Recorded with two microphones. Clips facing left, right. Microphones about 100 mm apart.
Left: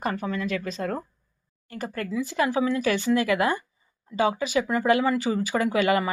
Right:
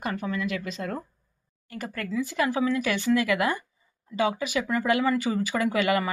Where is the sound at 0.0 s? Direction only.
40° left (ahead or behind).